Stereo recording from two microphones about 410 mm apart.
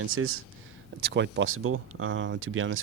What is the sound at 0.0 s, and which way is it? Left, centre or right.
Speech, right.